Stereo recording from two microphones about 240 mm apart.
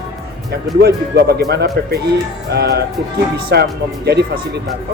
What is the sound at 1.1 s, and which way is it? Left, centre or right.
Speech, right.